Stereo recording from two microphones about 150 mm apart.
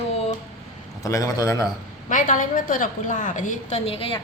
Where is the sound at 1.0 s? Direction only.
20° left (ahead or behind).